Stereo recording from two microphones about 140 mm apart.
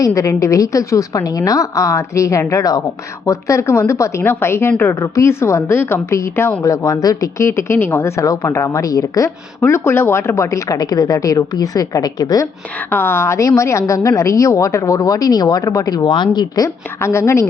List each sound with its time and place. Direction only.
0.0 s a woman's voice: 25° left (ahead or behind)
12.9 s a woman's voice: 15° left (ahead or behind)